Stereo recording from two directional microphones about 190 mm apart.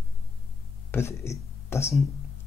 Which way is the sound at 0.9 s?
15° left (ahead or behind).